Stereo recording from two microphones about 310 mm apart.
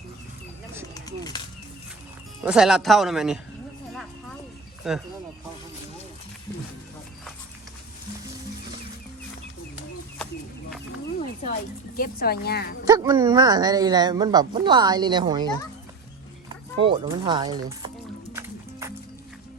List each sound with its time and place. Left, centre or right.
0.9 s bird: centre
2.4 s speech: centre
4.8 s speech: centre
11.9 s a woman's voice: left
12.9 s speech: centre
16.8 s speech: centre
18.3 s music: centre